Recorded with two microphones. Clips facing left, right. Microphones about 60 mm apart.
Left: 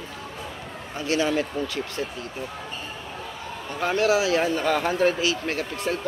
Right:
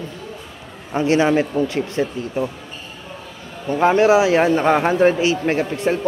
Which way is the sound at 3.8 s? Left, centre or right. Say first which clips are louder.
Right 8 dB; right.